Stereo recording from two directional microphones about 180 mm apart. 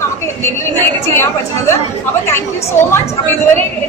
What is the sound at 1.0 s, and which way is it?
Speech, 15° left (ahead or behind).